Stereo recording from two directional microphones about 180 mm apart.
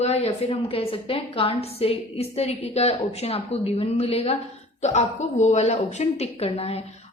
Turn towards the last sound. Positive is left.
turn(degrees=35)  # may be behind; listen again after turning